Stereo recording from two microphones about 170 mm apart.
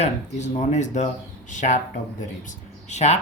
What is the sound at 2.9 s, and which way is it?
Speech, 40° left (ahead or behind).